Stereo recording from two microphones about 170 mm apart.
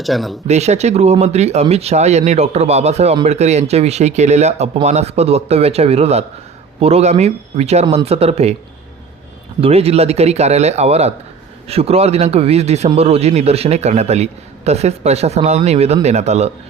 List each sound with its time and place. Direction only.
0.0 s speech: centre (ahead or behind)
0.4 s a man's voice: 40° right (ahead or behind)
9.6 s a man's voice: 35° right (ahead or behind)